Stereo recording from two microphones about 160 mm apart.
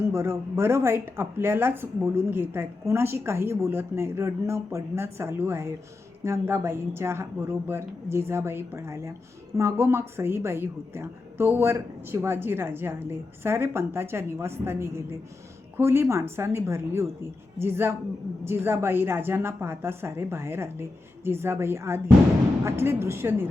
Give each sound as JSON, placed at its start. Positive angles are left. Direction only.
{"t": 0.0, "sound": "a woman's voice", "side_deg": -15}